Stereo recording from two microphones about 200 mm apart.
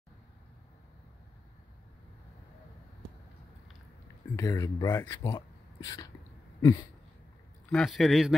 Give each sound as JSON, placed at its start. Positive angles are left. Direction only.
{"t": 4.4, "sound": "speech", "side_deg": 15}
{"t": 6.6, "sound": "a sound", "side_deg": 20}
{"t": 7.7, "sound": "a man's voice", "side_deg": 0}